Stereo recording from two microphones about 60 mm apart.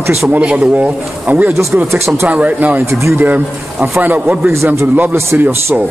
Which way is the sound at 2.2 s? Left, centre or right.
Right.